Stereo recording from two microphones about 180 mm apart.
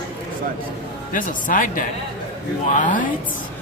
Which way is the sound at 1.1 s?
45° left (ahead or behind).